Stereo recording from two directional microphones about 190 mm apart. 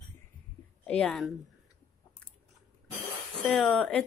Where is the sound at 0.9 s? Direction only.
5° left (ahead or behind).